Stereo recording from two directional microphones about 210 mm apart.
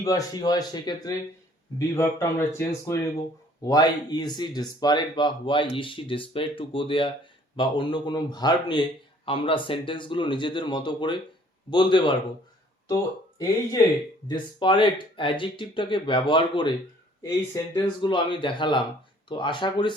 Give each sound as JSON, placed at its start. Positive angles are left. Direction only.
{"t": 0.0, "sound": "a man's voice", "side_deg": 15}
{"t": 14.3, "sound": "a man's voice", "side_deg": 20}